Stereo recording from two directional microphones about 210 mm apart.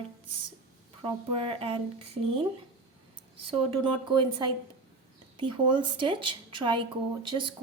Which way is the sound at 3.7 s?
20° right (ahead or behind).